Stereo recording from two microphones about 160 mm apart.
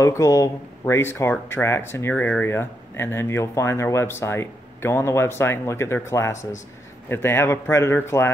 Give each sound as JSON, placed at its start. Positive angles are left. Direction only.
{"t": 0.0, "sound": "speech", "side_deg": 20}